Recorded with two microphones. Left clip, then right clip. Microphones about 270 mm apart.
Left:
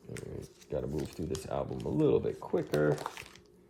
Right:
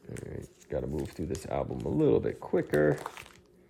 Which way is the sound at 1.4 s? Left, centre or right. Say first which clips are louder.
Right 4 dB; right.